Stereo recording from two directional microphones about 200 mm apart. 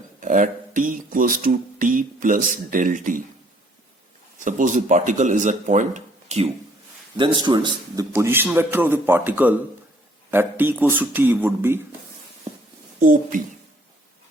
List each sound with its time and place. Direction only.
0.2 s speech: 40° right (ahead or behind)
4.4 s a man's voice: 40° right (ahead or behind); by 11.8 s 10° right (ahead or behind)
13.0 s speech: 45° right (ahead or behind)